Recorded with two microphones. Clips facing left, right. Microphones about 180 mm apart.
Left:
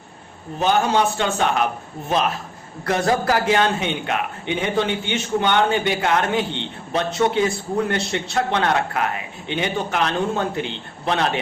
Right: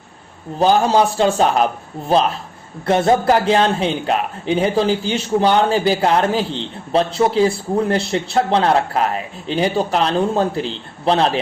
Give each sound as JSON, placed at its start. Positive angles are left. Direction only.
{"t": 0.6, "sound": "a man's voice", "side_deg": -35}